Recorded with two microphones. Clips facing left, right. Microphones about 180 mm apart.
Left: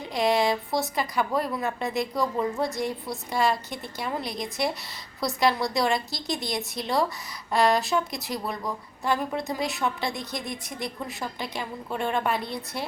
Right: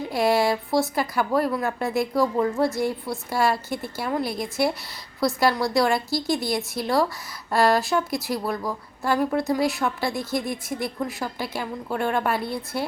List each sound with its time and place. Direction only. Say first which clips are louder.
0.1 s speech: right 2 dB; 5° right (ahead or behind)